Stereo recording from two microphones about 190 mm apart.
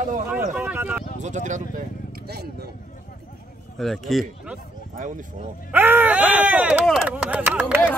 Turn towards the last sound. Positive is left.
turn(degrees=-10)  # may be behind; listen again after turning